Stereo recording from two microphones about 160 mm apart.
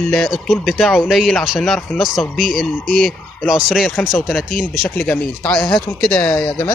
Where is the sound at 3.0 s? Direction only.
Centre (ahead or behind).